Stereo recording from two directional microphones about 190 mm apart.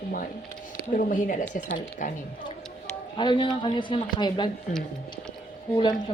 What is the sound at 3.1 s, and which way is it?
A woman's voice, 25° left (ahead or behind).